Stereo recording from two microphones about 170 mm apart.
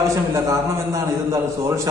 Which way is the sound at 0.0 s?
20° right (ahead or behind).